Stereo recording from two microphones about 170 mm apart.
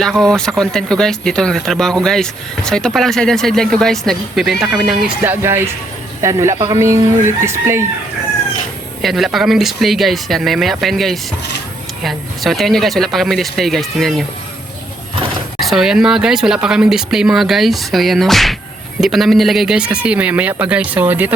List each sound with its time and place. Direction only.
0.0 s a man's voice: 5° left (ahead or behind); by 7.9 s 15° right (ahead or behind)
9.0 s speech: centre (ahead or behind)
15.6 s a man's voice: centre (ahead or behind)